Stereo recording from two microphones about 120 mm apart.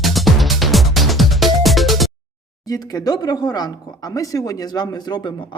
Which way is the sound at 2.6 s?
30° left (ahead or behind).